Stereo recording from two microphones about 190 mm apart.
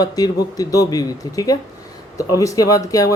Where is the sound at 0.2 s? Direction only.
20° left (ahead or behind).